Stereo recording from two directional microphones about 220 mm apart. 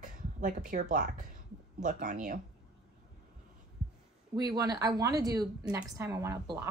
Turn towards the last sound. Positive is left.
turn(degrees=-15)  # may be behind; listen again after turning